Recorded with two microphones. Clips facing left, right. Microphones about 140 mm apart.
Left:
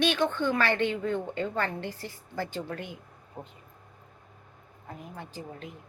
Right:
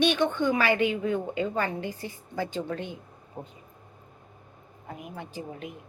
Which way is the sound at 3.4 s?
10° right (ahead or behind).